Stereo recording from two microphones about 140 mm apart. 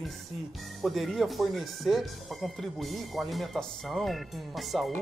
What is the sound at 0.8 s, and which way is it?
Speech, centre (ahead or behind).